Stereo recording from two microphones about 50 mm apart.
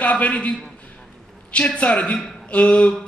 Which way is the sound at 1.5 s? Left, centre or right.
Left.